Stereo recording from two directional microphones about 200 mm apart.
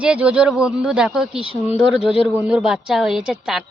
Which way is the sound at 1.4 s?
25° left (ahead or behind).